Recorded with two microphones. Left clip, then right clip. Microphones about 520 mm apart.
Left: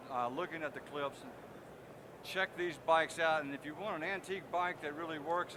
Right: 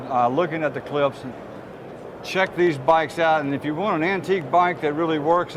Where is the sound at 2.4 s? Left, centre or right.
Right.